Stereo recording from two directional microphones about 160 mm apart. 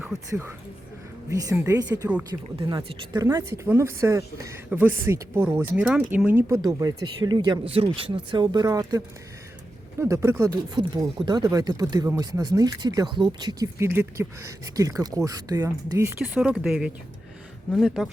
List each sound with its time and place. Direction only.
0.1 s speech: 20° right (ahead or behind)
1.3 s speech: 20° right (ahead or behind)
6.6 s speech: 20° right (ahead or behind)
16.2 s speech: 5° right (ahead or behind)